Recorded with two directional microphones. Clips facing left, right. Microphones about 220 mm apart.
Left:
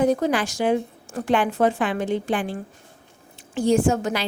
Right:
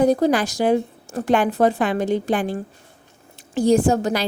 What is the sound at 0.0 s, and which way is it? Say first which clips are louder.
A woman's voice: right 3 dB; 35° right (ahead or behind).